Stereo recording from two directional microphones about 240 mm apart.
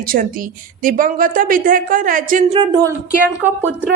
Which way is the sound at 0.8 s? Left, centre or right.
Right.